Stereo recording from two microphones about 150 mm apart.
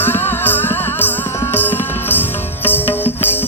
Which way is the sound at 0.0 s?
15° left (ahead or behind).